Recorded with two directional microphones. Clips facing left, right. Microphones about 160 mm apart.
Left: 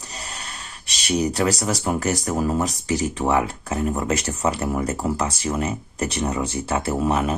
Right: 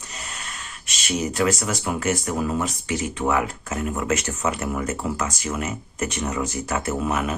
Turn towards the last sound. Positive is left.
turn(degrees=30)  # may be behind; listen again after turning